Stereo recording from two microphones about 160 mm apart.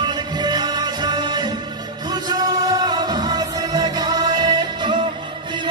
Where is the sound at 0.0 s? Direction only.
25° right (ahead or behind).